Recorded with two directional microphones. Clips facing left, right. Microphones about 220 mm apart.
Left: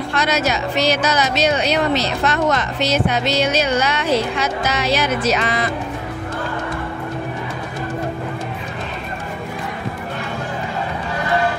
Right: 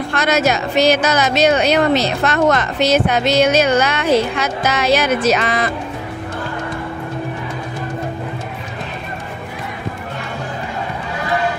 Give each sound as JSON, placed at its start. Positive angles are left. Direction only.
{"t": 0.1, "sound": "speech", "side_deg": -50}